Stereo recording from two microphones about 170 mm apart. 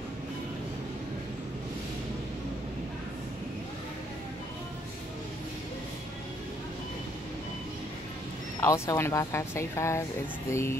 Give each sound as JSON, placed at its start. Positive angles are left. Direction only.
{"t": 8.5, "sound": "speech", "side_deg": 15}